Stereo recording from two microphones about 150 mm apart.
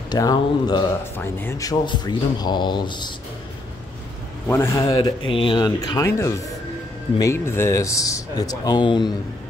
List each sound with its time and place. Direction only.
0.1 s speech: 25° left (ahead or behind)
1.1 s speech: 15° left (ahead or behind); by 3.1 s 30° left (ahead or behind)
4.5 s speech: 20° left (ahead or behind)